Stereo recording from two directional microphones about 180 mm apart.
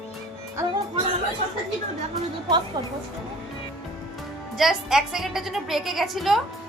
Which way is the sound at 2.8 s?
20° right (ahead or behind).